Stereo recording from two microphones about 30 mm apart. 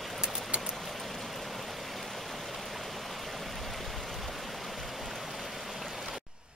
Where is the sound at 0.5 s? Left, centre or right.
Right.